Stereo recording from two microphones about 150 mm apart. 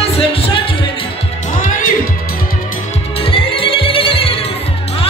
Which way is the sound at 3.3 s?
35° left (ahead or behind).